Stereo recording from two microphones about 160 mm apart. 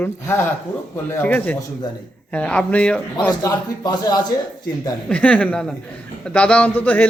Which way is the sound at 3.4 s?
25° left (ahead or behind).